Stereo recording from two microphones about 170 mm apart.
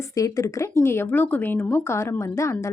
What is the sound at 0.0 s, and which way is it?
Speech, 20° left (ahead or behind).